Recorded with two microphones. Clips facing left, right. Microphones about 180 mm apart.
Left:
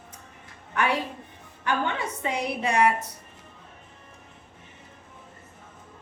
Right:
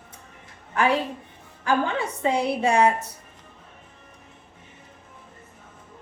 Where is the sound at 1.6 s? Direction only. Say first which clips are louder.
Right 4 dB; 30° right (ahead or behind).